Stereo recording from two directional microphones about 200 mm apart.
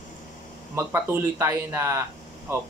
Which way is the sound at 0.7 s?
10° right (ahead or behind).